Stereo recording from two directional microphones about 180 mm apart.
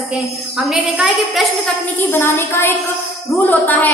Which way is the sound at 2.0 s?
15° left (ahead or behind).